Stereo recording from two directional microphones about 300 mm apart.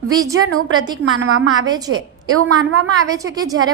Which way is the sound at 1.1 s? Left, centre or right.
Right.